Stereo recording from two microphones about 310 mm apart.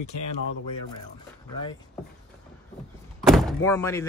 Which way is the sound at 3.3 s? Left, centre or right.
Centre.